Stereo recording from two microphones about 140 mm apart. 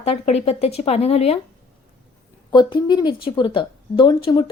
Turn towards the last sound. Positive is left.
turn(degrees=35)  # may be behind; listen again after turning